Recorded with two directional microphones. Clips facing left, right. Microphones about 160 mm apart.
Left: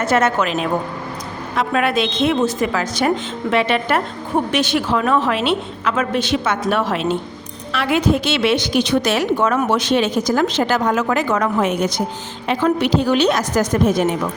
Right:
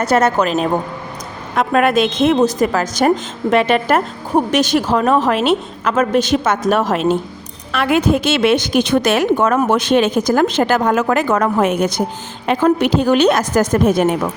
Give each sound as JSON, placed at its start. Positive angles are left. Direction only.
{"t": 0.0, "sound": "a woman's voice", "side_deg": -40}